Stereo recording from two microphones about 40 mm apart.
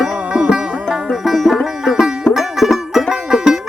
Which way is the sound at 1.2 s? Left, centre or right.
Centre.